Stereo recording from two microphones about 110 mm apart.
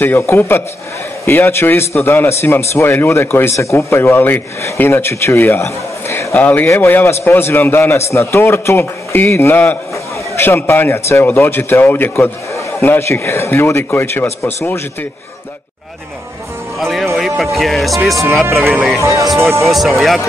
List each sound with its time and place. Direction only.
0.0 s a man's voice: 20° left (ahead or behind)
16.8 s speech: centre (ahead or behind)
18.6 s speech: 20° right (ahead or behind)
18.9 s speech: 30° right (ahead or behind)
19.2 s speech: centre (ahead or behind)